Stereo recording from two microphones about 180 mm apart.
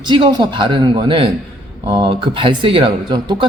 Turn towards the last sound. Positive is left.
turn(degrees=-25)  # may be behind; listen again after turning